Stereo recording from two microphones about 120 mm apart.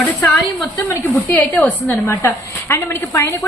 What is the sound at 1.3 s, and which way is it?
A woman's voice, 10° left (ahead or behind).